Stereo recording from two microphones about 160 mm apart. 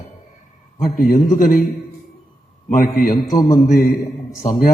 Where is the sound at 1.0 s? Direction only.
60° left (ahead or behind).